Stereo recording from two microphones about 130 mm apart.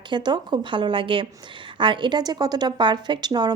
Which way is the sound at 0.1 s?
35° right (ahead or behind).